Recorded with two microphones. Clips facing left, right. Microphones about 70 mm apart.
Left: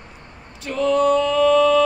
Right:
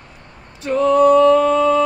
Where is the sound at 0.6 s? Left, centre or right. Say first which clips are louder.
Right 5 dB; right.